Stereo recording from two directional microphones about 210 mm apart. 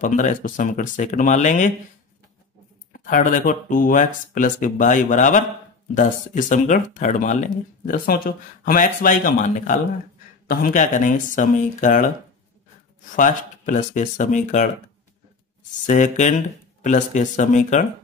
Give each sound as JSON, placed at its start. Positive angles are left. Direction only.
{"t": 0.0, "sound": "speech", "side_deg": 35}
{"t": 2.9, "sound": "speech", "side_deg": 40}
{"t": 13.1, "sound": "speech", "side_deg": 35}
{"t": 15.9, "sound": "speech", "side_deg": 35}